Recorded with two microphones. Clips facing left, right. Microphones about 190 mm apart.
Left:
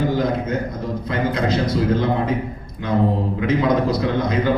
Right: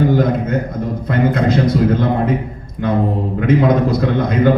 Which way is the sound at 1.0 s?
55° right (ahead or behind).